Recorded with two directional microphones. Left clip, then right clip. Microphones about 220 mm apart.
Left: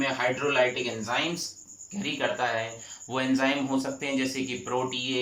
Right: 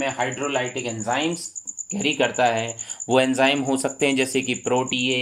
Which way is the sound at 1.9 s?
45° right (ahead or behind).